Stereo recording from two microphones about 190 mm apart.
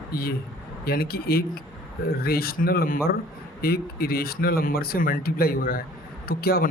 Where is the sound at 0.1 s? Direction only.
50° left (ahead or behind).